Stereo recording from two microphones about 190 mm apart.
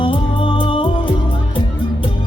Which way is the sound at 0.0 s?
25° left (ahead or behind).